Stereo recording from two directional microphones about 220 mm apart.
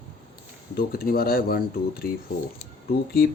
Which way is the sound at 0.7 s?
45° left (ahead or behind).